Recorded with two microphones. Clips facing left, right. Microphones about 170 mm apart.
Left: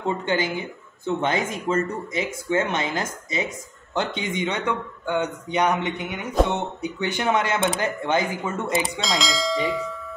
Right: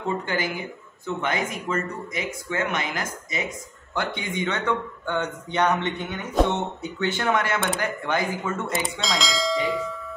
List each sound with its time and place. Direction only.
0.2 s speech: 25° left (ahead or behind)
9.0 s speech: centre (ahead or behind)